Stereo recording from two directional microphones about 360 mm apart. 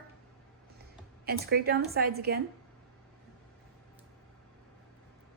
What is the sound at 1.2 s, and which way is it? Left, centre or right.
A woman's voice, right.